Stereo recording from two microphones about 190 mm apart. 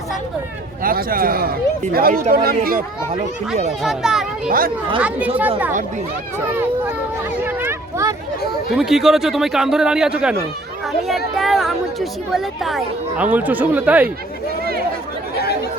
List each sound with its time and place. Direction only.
0.8 s speech: 50° right (ahead or behind)
3.8 s a man's voice: centre (ahead or behind)
4.4 s speech: 50° right (ahead or behind)
4.9 s speech: 5° right (ahead or behind)
7.4 s a sound: 10° right (ahead or behind)
8.7 s a man's voice: centre (ahead or behind)
11.3 s speech: centre (ahead or behind)